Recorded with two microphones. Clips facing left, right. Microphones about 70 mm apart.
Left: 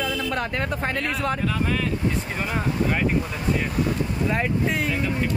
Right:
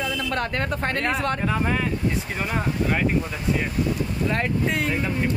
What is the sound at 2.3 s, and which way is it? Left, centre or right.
Speech, centre.